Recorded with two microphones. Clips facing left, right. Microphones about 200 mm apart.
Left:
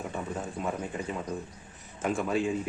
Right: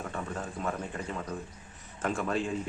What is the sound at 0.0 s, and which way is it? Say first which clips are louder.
Speech: left 2 dB; 10° left (ahead or behind).